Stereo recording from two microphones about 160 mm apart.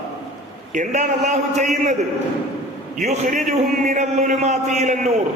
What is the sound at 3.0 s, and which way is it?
A man's voice, 50° right (ahead or behind).